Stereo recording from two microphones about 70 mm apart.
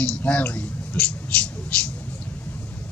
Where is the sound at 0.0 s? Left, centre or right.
Centre.